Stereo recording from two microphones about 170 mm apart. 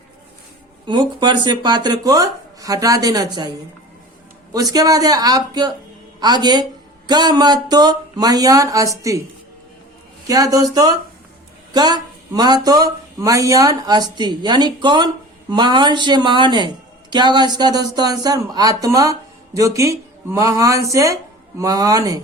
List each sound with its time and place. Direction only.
0.9 s speech: 25° right (ahead or behind)
4.5 s speech: 20° right (ahead or behind)
10.2 s speech: 20° right (ahead or behind)